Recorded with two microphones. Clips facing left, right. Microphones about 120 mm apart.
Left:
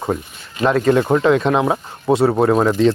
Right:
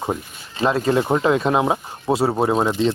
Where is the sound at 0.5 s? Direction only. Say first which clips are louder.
Left 4 dB; 30° right (ahead or behind); by 2.8 s 15° right (ahead or behind).